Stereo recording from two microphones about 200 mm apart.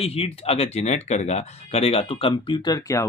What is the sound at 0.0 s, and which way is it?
Speech, 30° left (ahead or behind).